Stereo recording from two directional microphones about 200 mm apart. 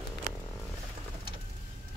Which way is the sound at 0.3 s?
35° right (ahead or behind).